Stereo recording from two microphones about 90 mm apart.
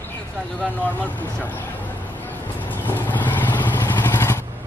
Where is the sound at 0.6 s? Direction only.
20° left (ahead or behind).